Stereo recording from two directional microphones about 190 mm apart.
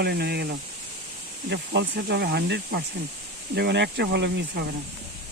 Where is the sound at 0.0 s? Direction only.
60° right (ahead or behind).